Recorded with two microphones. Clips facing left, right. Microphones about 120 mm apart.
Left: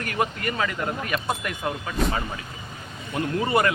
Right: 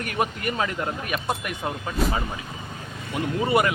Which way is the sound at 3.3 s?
15° right (ahead or behind).